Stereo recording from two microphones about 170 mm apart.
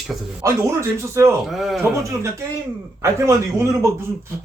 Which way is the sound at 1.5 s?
Centre (ahead or behind).